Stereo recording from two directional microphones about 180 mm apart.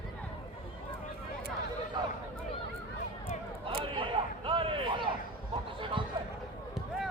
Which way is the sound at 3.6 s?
30° right (ahead or behind).